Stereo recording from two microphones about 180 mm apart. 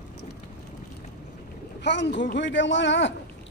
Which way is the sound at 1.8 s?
75° left (ahead or behind).